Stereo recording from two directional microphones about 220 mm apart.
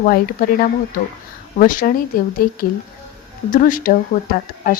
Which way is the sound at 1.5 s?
40° left (ahead or behind).